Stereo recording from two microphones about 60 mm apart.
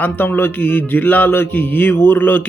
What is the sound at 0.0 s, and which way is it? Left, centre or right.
Speech, left.